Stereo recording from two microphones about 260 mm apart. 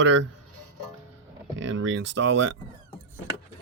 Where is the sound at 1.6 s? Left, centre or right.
Right.